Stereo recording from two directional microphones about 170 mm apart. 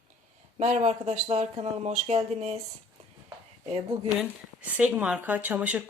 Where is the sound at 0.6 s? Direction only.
40° right (ahead or behind).